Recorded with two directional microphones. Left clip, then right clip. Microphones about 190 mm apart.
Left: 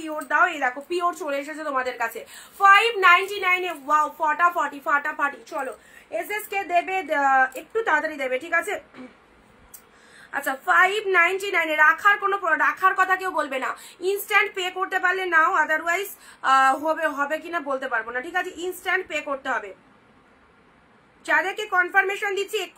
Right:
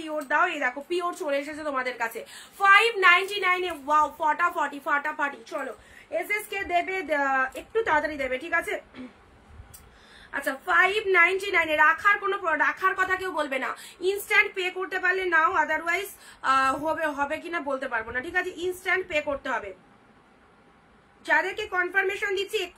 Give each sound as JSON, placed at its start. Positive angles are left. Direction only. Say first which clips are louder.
{"t": 0.0, "sound": "a woman's voice", "louder": "left 3 dB", "side_deg": -10}
{"t": 10.3, "sound": "a woman's voice", "louder": "left 3 dB", "side_deg": -10}
{"t": 21.2, "sound": "a woman's voice", "louder": "left 2 dB", "side_deg": -10}